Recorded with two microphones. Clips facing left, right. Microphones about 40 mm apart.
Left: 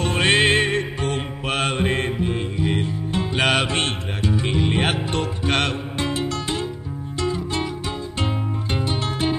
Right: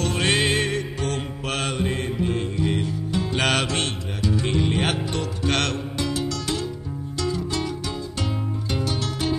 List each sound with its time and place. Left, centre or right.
0.0 s music: left
2.1 s music: centre
3.3 s music: centre
3.6 s mantra: left
4.4 s music: centre
5.9 s music: left
8.7 s music: left